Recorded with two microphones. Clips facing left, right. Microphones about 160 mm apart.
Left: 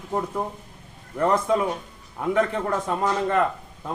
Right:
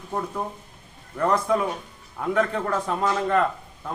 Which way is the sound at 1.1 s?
20° left (ahead or behind).